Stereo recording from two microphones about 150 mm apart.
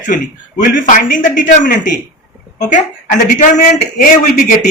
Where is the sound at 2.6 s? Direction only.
55° left (ahead or behind).